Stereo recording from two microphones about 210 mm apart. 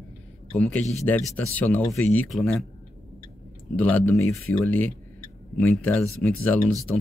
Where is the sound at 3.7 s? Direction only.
5° left (ahead or behind).